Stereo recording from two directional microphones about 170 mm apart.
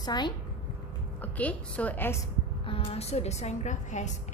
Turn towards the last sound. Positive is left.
turn(degrees=45)  # may be behind; listen again after turning